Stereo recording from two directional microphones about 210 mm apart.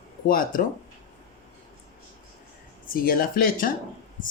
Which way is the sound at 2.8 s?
45° left (ahead or behind).